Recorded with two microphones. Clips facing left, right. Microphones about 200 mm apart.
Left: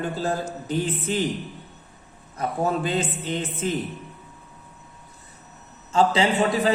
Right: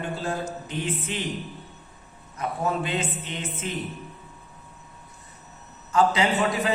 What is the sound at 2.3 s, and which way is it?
A man's voice, 35° left (ahead or behind).